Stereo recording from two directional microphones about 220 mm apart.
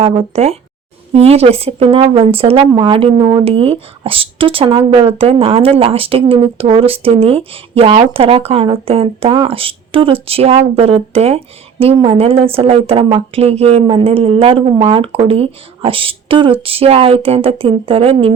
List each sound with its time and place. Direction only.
0.0 s speech: 25° right (ahead or behind)